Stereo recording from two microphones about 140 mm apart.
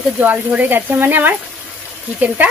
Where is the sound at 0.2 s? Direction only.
10° right (ahead or behind).